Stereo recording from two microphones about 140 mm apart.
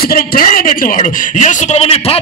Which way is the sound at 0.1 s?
90° left.